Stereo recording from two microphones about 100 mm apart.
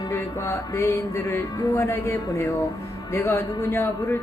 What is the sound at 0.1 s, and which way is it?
Speech, 25° left (ahead or behind).